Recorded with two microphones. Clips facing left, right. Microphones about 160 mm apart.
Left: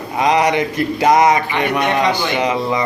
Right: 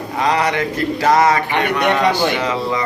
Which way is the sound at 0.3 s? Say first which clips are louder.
Left 3 dB; 15° left (ahead or behind).